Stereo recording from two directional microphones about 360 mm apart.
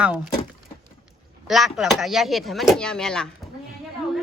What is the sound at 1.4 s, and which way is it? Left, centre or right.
Speech, centre.